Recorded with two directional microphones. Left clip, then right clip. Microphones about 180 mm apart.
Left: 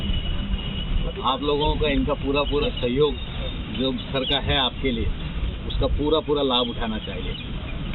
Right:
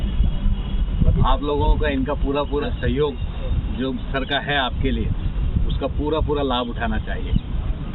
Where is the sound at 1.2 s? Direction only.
Centre (ahead or behind).